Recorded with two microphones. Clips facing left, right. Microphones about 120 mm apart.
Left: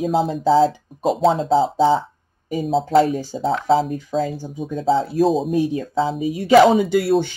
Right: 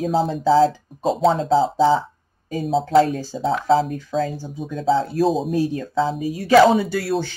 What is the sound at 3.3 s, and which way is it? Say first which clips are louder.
Speech: right 1 dB; centre (ahead or behind).